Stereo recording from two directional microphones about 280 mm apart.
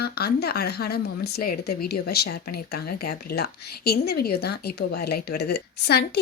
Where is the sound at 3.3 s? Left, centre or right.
Left.